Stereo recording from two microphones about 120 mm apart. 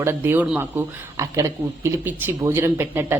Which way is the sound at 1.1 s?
25° right (ahead or behind).